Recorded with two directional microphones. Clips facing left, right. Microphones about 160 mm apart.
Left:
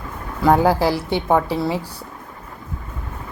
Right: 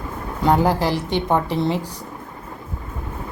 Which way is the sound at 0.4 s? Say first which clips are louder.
Left 2 dB; 10° left (ahead or behind).